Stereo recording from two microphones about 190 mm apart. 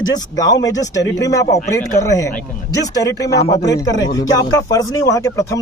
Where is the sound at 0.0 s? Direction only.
20° left (ahead or behind).